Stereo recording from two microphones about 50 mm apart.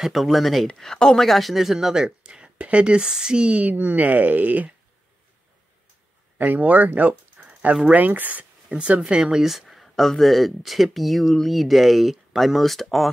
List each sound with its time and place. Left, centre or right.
0.0 s speech: centre; by 3.7 s right
3.7 s speech: right
6.3 s speech: right
7.3 s a sound: right
7.9 s speech: right
8.6 s speech: right
9.2 s speech: centre